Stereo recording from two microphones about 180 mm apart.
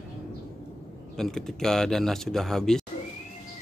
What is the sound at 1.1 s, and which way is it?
Speech, centre (ahead or behind).